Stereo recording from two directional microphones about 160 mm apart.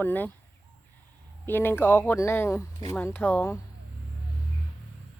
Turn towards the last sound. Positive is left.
turn(degrees=15)  # may be behind; listen again after turning